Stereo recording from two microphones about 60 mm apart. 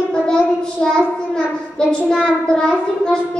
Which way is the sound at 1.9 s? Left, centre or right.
Centre.